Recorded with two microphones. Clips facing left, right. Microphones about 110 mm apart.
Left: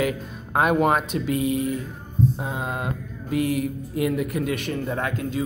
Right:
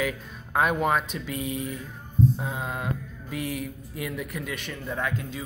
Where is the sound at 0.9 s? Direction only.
55° left (ahead or behind).